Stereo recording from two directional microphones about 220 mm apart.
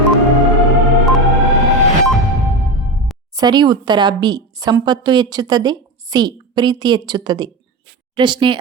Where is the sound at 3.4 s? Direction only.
20° right (ahead or behind).